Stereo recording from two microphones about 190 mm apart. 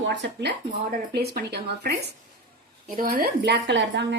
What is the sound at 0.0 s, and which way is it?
Speech, 70° right (ahead or behind).